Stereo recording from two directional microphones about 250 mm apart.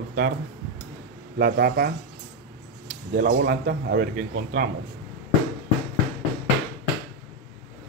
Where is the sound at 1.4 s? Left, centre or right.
Right.